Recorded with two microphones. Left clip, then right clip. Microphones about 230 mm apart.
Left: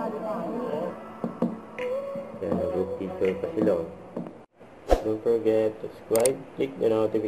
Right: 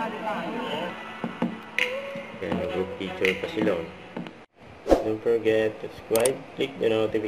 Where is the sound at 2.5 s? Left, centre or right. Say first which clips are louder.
Left 1 dB; centre.